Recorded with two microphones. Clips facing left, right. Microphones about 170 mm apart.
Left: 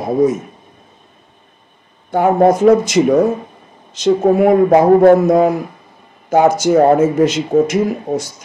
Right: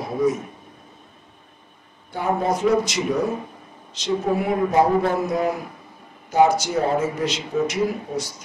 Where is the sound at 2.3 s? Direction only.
50° left (ahead or behind).